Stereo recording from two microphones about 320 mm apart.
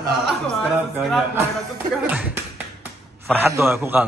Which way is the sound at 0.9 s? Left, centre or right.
Centre.